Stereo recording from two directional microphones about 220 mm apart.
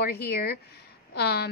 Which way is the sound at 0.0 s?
45° left (ahead or behind).